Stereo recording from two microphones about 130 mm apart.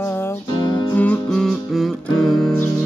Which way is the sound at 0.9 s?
10° left (ahead or behind).